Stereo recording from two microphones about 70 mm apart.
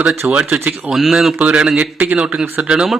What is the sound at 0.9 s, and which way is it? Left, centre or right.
Speech, centre.